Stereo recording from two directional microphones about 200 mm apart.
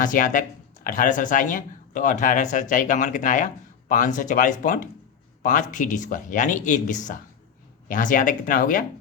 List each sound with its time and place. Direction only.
0.0 s speech: 40° left (ahead or behind)